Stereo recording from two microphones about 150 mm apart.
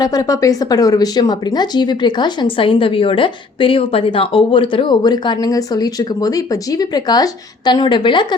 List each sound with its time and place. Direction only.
0.0 s speech: 25° left (ahead or behind)